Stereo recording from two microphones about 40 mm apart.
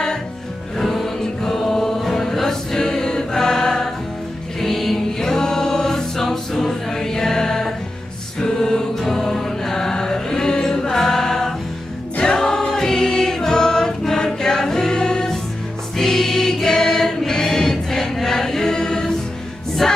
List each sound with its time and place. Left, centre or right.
0.7 s music: centre
1.2 s choir: centre
8.4 s music: centre
12.2 s choir: centre
18.1 s chant: centre
19.8 s music: centre